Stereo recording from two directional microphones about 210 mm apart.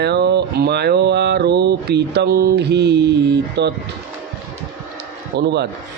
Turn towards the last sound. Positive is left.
turn(degrees=-55)  # may be behind; listen again after turning